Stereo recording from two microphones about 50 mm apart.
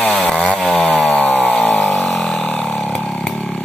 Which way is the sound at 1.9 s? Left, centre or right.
Centre.